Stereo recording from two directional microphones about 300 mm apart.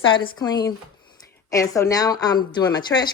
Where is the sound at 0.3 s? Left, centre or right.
Centre.